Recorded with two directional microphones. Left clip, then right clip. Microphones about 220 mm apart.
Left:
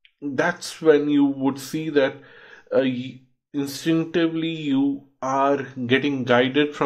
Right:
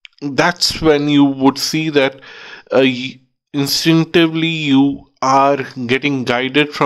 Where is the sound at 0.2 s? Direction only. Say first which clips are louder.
Right 9 dB; 40° right (ahead or behind).